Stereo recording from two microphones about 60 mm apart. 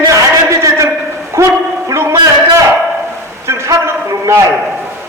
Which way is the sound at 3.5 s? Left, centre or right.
Right.